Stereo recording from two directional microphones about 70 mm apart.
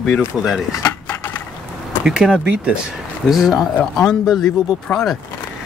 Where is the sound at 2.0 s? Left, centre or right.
Centre.